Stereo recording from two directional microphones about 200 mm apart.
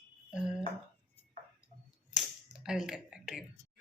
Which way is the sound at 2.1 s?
5° right (ahead or behind).